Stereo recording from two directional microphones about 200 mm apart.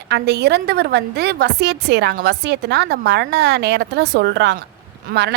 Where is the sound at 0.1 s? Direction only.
55° right (ahead or behind).